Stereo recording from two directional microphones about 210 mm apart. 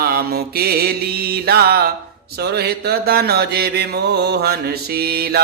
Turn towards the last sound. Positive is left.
turn(degrees=-45)  # may be behind; listen again after turning